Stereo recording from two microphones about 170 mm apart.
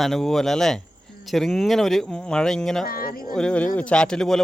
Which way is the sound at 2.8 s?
60° left (ahead or behind).